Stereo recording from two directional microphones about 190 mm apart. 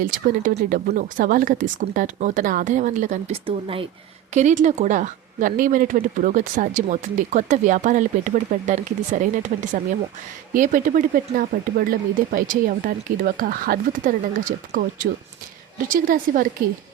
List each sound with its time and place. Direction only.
0.0 s speech: 45° right (ahead or behind)
3.4 s speech: 30° right (ahead or behind)
4.4 s speech: 40° right (ahead or behind)